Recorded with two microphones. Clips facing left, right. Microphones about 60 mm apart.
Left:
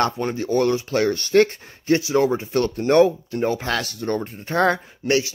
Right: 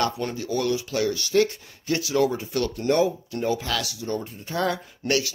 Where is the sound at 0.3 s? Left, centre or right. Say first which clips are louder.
Left 5 dB; left.